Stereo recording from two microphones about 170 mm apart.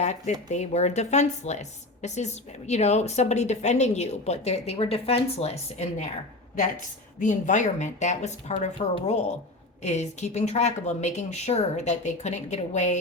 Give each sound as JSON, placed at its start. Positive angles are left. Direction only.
{"t": 0.0, "sound": "speech", "side_deg": 40}
{"t": 7.2, "sound": "speech", "side_deg": 45}